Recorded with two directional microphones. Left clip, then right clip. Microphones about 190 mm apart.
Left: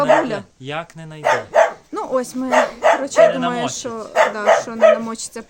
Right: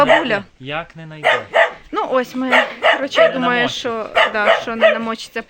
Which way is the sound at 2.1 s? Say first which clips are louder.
Right 1 dB; centre (ahead or behind).